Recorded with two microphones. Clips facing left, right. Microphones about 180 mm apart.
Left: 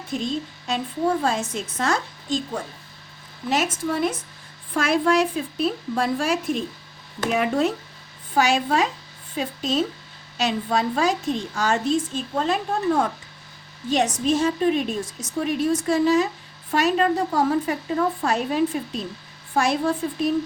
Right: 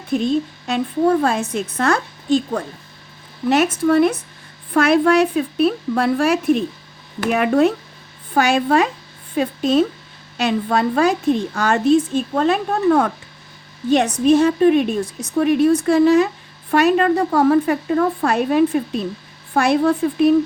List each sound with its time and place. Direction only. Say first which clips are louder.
0.1 s a woman's voice: right 8 dB; 60° right (ahead or behind)